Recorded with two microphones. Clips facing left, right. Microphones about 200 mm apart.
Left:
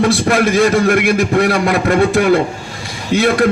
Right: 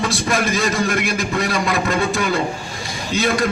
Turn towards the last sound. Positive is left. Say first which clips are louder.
# left 6 dB
turn(degrees=60)  # may be behind; listen again after turning